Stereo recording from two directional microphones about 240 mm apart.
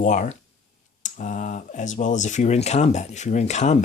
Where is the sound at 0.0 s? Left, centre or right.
Left.